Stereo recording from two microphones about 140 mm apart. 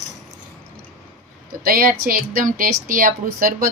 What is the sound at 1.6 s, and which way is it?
A woman's voice, 90° right.